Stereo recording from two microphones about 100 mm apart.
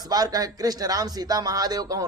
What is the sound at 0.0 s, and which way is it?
Speech, 40° right (ahead or behind).